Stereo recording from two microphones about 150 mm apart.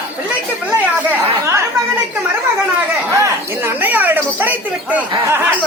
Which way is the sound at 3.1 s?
15° right (ahead or behind).